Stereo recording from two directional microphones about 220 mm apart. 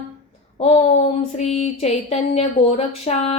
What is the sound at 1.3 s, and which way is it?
Speech, 30° left (ahead or behind).